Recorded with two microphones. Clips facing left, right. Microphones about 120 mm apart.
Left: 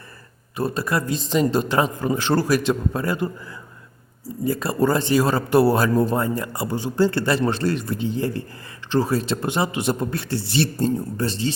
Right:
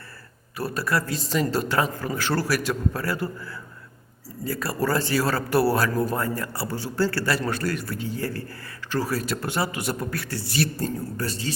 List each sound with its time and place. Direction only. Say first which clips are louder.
0.5 s speech: left 3 dB; 20° left (ahead or behind)
4.4 s speech: left 5 dB; 20° left (ahead or behind)